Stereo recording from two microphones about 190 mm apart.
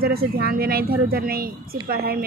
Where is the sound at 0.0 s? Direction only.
50° right (ahead or behind).